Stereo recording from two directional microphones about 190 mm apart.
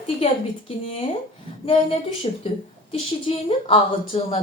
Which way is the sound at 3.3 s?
30° left (ahead or behind).